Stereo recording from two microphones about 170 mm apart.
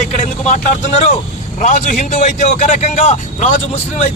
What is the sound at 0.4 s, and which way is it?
A man's voice, 45° left (ahead or behind).